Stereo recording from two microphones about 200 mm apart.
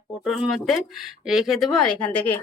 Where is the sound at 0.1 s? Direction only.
5° right (ahead or behind).